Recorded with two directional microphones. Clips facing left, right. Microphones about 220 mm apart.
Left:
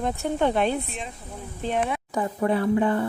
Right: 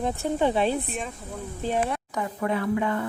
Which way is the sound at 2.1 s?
30° left (ahead or behind).